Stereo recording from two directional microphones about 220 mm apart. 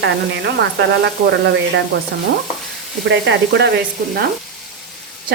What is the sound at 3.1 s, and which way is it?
Speech, 55° right (ahead or behind).